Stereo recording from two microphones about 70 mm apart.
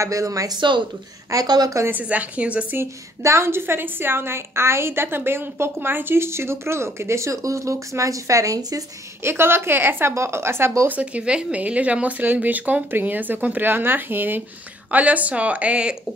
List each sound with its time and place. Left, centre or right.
0.0 s speech: right
0.5 s speech: right
1.3 s a woman's voice: right
1.9 s speech: right
2.8 s a woman's voice: right
9.2 s a woman's voice: right
10.9 s speech: centre